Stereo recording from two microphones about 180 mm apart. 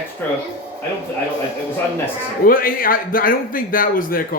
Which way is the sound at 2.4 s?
50° left (ahead or behind).